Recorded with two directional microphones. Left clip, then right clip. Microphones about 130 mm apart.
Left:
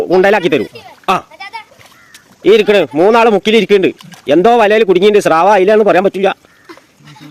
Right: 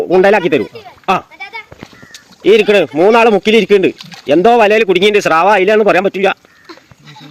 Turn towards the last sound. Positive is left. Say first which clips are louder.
# left 1 dB
turn(degrees=10)  # may be behind; listen again after turning